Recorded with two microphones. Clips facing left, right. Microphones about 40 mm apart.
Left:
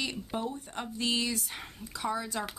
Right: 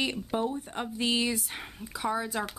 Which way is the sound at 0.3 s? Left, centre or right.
Centre.